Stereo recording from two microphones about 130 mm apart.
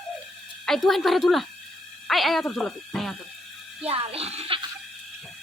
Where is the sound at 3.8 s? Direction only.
50° right (ahead or behind).